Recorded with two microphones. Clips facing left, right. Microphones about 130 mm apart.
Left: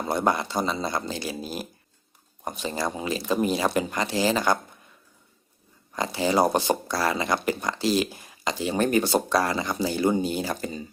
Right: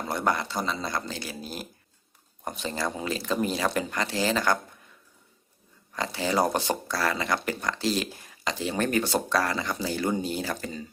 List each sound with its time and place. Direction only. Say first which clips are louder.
0.1 s speech: left 3 dB; 20° left (ahead or behind)
5.9 s speech: left 4 dB; 15° left (ahead or behind)